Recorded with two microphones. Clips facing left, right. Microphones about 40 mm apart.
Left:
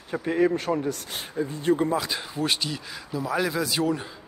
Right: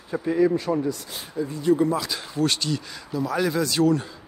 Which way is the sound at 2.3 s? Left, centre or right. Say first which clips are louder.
Right 5 dB; centre.